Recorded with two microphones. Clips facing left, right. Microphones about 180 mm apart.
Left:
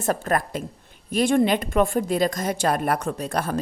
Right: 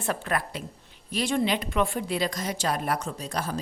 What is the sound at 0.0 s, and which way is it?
A woman's voice, 45° left (ahead or behind).